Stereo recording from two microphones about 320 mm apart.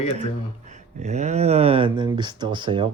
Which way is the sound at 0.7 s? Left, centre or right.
Right.